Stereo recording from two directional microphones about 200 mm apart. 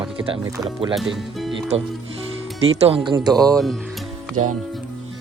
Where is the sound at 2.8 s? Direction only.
25° right (ahead or behind).